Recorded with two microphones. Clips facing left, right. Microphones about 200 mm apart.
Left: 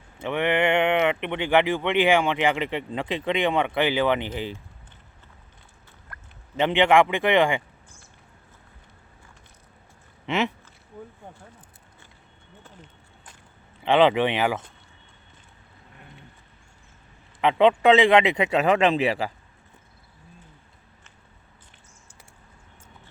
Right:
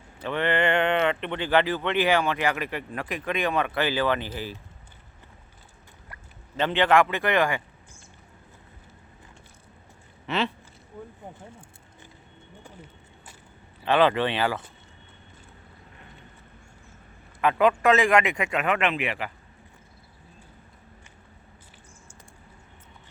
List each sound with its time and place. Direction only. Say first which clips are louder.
0.3 s speech: left 2 dB; 10° left (ahead or behind)
6.6 s speech: left 2 dB; 15° left (ahead or behind)
10.2 s speech: left 2 dB; 20° left (ahead or behind)
12.6 s a sound: right 2 dB; 10° right (ahead or behind)
13.8 s speech: left 3 dB; 15° left (ahead or behind)
17.4 s speech: left 3 dB; 20° left (ahead or behind)